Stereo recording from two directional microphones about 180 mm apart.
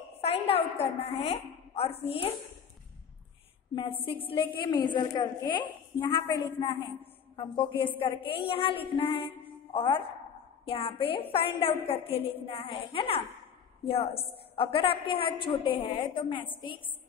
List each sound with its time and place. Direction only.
0.2 s a woman's voice: 35° left (ahead or behind)
3.7 s a woman's voice: 25° left (ahead or behind)
14.5 s a woman's voice: 30° left (ahead or behind)